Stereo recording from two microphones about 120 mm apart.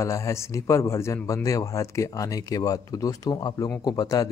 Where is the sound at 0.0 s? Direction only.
25° left (ahead or behind).